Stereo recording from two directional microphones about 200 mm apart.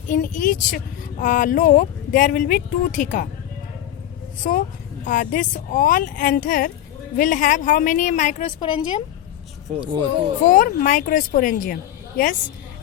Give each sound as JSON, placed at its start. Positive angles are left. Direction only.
{"t": 0.1, "sound": "a woman's voice", "side_deg": 40}
{"t": 4.4, "sound": "a woman's voice", "side_deg": 45}
{"t": 8.5, "sound": "a woman's voice", "side_deg": 25}
{"t": 10.4, "sound": "a woman's voice", "side_deg": 40}